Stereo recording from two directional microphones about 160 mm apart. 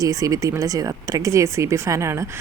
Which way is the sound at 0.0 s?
20° right (ahead or behind).